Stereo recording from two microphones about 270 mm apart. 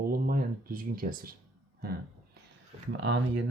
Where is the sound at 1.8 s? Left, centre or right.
Right.